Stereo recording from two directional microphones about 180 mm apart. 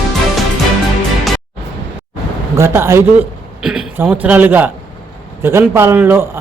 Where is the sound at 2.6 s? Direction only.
15° right (ahead or behind).